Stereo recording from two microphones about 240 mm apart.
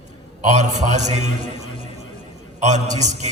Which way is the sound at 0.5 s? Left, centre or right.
Right.